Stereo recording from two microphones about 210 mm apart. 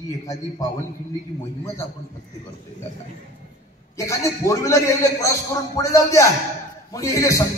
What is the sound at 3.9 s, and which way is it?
Speech, 15° left (ahead or behind).